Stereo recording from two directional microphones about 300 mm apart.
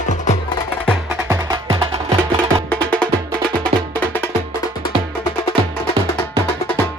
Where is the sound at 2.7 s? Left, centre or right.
Centre.